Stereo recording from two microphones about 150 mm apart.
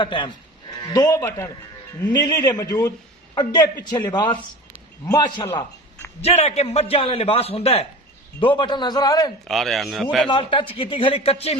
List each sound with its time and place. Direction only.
0.0 s a man's voice: 35° left (ahead or behind)
0.9 s a man's voice: 20° left (ahead or behind)
6.2 s a man's voice: 45° left (ahead or behind); by 9.3 s 25° left (ahead or behind)
9.4 s speech: centre (ahead or behind)
10.2 s a man's voice: 35° left (ahead or behind)